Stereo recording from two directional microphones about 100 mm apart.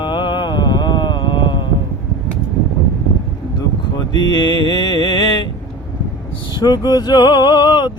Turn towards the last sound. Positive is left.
turn(degrees=50)  # may be behind; listen again after turning